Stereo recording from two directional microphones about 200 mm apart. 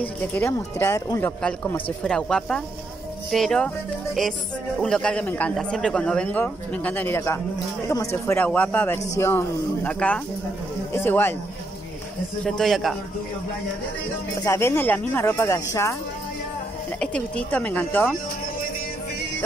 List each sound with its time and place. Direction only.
0.0 s speech: 10° left (ahead or behind)
12.4 s speech: centre (ahead or behind)
14.4 s speech: 15° left (ahead or behind)
17.0 s speech: 5° left (ahead or behind)